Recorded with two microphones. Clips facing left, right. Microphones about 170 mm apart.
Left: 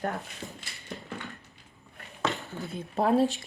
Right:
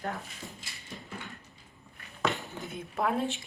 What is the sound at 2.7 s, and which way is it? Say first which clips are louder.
Speech: left 6 dB; 35° left (ahead or behind).